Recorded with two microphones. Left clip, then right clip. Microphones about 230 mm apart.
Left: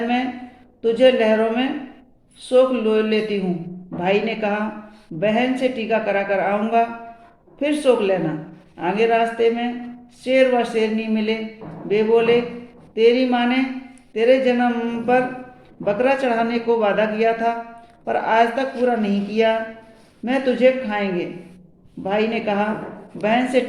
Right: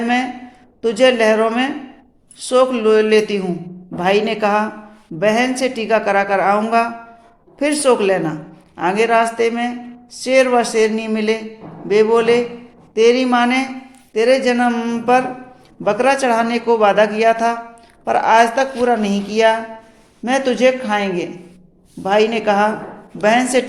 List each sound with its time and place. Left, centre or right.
0.8 s a man's voice: right